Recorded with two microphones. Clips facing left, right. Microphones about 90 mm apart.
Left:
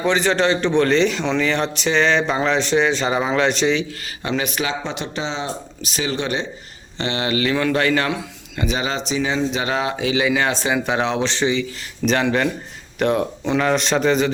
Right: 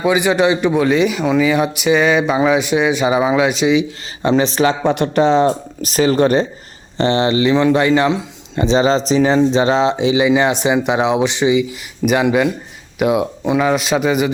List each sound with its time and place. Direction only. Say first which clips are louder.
0.0 s a man's voice: right 4 dB; 10° right (ahead or behind)
4.2 s speech: right 9 dB; 30° right (ahead or behind)
4.8 s a man's voice: right 12 dB; 55° right (ahead or behind); by 14.3 s 10° right (ahead or behind)